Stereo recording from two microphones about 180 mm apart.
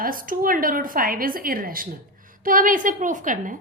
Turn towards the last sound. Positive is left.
turn(degrees=-45)  # may be behind; listen again after turning